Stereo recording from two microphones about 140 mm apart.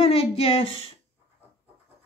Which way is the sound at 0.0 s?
45° left (ahead or behind).